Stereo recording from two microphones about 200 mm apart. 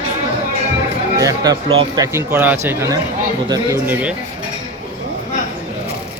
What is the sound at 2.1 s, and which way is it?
Speech, 10° right (ahead or behind).